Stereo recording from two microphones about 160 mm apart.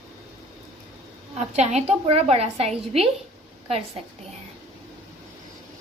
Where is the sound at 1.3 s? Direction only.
45° right (ahead or behind).